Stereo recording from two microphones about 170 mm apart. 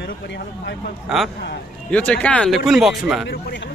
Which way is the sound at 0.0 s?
90° left.